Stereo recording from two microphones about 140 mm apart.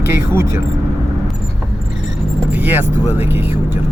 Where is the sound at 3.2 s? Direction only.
15° right (ahead or behind).